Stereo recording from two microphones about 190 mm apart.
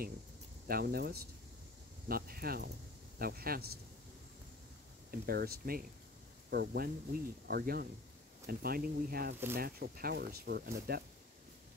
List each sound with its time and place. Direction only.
0.7 s speech: 50° right (ahead or behind)
5.2 s speech: 55° right (ahead or behind)